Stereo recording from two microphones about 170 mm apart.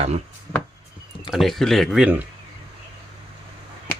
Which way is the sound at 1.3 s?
Centre (ahead or behind).